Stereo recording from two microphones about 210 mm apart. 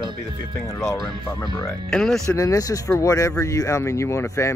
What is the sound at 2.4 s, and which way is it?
Speech, 15° left (ahead or behind).